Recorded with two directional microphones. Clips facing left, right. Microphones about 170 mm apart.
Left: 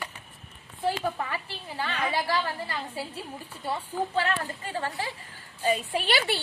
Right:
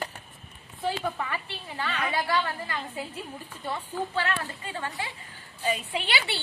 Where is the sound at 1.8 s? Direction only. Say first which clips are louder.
Left 1 dB; 30° left (ahead or behind).